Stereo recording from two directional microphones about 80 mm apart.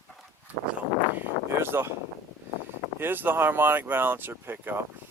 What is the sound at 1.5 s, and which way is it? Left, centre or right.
Speech, right.